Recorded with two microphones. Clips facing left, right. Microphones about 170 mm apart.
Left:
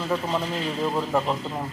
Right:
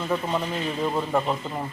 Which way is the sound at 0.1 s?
5° right (ahead or behind).